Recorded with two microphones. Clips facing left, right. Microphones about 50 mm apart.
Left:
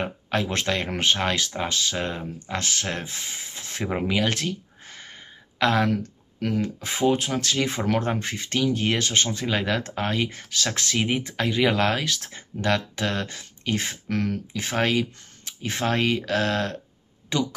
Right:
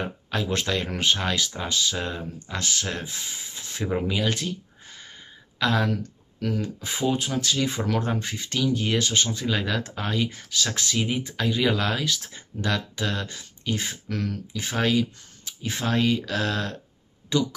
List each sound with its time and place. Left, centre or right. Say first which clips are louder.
0.0 s speech: left 3 dB; left
4.1 s a sound: left 2 dB; left
5.6 s speech: left 2 dB; left